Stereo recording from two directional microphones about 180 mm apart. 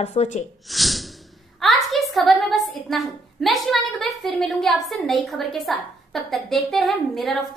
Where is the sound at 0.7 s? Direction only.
Centre (ahead or behind).